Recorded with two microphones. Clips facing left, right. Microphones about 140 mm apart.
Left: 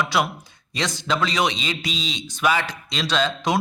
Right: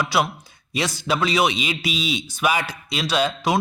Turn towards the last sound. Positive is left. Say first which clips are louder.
# right 1 dB
turn(degrees=-5)  # may be behind; listen again after turning